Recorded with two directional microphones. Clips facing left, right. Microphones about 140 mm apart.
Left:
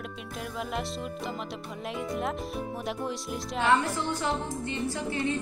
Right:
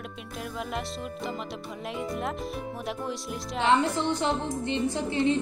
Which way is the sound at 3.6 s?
20° right (ahead or behind).